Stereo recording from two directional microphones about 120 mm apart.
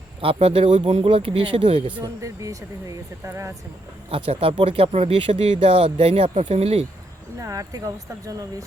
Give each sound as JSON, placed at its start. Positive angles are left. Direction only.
{"t": 0.3, "sound": "speech", "side_deg": -70}
{"t": 2.2, "sound": "speech", "side_deg": -25}
{"t": 4.1, "sound": "speech", "side_deg": -55}
{"t": 7.3, "sound": "speech", "side_deg": -25}